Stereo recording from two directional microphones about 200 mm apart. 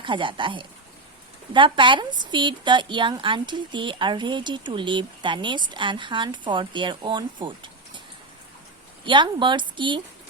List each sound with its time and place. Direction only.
0.0 s a woman's voice: 25° right (ahead or behind)
9.0 s a woman's voice: 25° right (ahead or behind)